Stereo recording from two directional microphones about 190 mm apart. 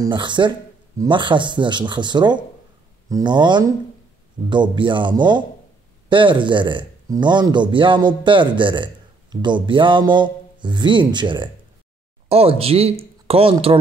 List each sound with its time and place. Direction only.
0.0 s speech: 25° right (ahead or behind)